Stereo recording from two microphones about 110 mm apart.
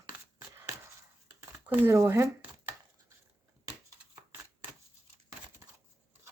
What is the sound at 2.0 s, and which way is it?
Speech, 30° right (ahead or behind).